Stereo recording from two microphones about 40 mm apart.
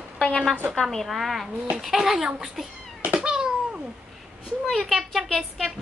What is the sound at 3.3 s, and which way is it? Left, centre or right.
Cat, centre.